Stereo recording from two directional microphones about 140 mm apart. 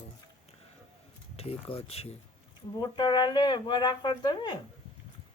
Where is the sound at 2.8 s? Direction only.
30° left (ahead or behind).